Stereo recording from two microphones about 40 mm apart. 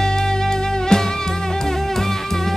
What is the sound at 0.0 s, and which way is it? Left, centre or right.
Music, centre.